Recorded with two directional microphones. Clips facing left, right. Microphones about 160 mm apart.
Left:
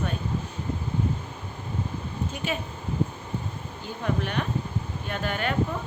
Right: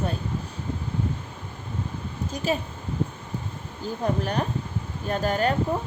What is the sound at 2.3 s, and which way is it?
Speech, 35° right (ahead or behind).